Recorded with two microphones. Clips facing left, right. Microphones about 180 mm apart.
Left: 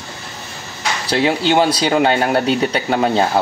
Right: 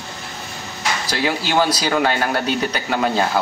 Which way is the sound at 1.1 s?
25° left (ahead or behind).